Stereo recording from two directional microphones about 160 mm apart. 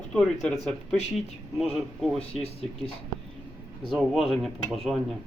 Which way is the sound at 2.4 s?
40° left (ahead or behind).